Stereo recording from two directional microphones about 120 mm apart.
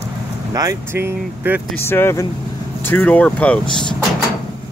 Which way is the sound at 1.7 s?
20° left (ahead or behind).